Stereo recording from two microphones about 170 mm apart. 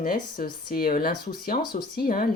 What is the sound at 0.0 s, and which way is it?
Speech, 60° left (ahead or behind).